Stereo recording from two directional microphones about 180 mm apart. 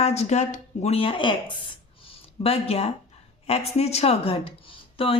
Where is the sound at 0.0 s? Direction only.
40° left (ahead or behind).